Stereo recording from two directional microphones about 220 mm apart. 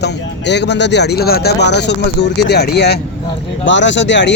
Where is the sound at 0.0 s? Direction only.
50° left (ahead or behind).